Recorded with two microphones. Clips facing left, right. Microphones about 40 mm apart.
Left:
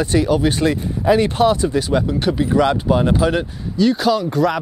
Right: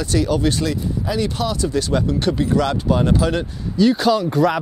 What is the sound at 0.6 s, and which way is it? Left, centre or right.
Speech, left.